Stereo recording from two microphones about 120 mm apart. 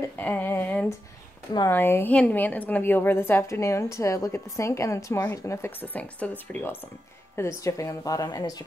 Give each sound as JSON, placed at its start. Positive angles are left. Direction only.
{"t": 0.2, "sound": "a woman's voice", "side_deg": 15}